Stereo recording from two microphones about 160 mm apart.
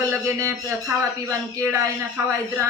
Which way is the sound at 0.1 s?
15° right (ahead or behind).